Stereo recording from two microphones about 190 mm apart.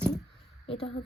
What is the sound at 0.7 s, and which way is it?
Speech, 30° left (ahead or behind).